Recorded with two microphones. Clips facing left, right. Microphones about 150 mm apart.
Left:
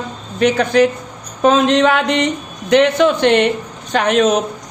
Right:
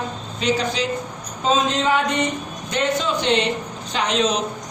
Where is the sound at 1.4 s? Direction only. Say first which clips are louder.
Left 8 dB; 70° left (ahead or behind).